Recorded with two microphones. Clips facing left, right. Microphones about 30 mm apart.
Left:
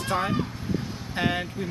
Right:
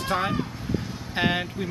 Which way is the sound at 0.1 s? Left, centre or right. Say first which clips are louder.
Even; centre.